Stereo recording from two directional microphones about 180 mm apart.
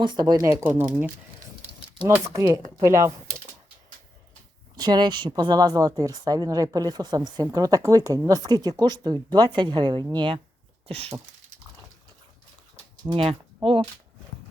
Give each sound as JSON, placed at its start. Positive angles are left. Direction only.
{"t": 0.0, "sound": "speech", "side_deg": -25}
{"t": 2.0, "sound": "speech", "side_deg": -15}
{"t": 4.7, "sound": "a woman's voice", "side_deg": -20}
{"t": 10.8, "sound": "a sound", "side_deg": -30}
{"t": 13.1, "sound": "speech", "side_deg": -30}